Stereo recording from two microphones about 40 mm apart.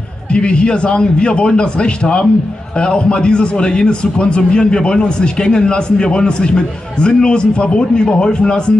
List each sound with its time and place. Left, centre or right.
0.3 s a man's voice: left